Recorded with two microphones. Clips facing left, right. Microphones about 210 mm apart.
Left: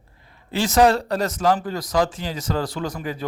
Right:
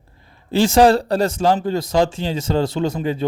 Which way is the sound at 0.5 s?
30° right (ahead or behind).